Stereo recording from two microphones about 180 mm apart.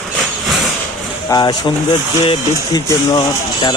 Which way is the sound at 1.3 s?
25° left (ahead or behind).